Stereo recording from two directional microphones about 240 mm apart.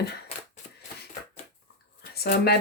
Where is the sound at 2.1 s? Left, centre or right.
Left.